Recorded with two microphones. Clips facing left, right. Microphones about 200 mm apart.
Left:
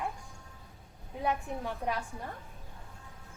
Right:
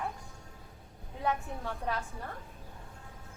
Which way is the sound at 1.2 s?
15° left (ahead or behind).